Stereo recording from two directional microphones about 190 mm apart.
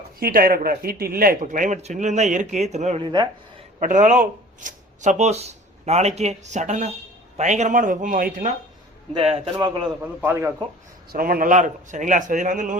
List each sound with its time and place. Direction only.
0.2 s speech: 50° right (ahead or behind)
9.1 s a man's voice: 30° right (ahead or behind)
10.0 s a man's voice: 10° right (ahead or behind)
11.1 s a man's voice: 50° right (ahead or behind)